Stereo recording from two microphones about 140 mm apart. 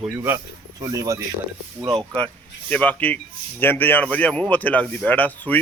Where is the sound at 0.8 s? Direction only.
25° right (ahead or behind).